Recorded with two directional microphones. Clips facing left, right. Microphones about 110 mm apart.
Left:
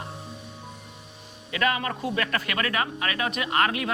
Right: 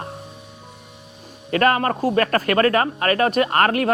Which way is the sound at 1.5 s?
50° right (ahead or behind).